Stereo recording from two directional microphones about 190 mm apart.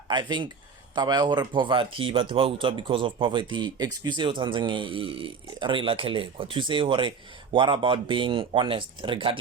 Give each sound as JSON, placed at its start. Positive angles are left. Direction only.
{"t": 0.1, "sound": "speech", "side_deg": -25}